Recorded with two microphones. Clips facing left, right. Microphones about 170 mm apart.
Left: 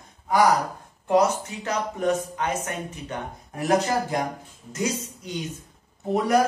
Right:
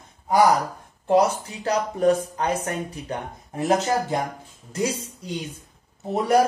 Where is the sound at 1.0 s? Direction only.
35° right (ahead or behind).